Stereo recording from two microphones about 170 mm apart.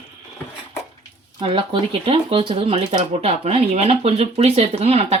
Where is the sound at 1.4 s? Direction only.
30° right (ahead or behind).